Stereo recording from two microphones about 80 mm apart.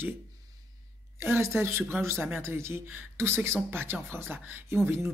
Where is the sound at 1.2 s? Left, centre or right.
Right.